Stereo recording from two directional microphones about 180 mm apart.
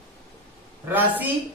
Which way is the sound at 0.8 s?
10° right (ahead or behind).